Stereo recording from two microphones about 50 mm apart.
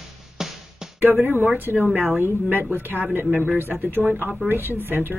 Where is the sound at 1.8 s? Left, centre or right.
Right.